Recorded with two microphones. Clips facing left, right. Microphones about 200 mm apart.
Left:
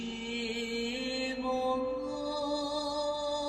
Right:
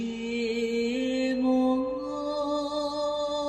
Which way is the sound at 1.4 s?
45° right (ahead or behind).